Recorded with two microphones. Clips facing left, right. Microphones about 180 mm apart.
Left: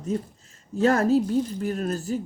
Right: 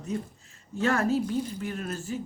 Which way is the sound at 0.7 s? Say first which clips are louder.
Left 6 dB; 40° left (ahead or behind).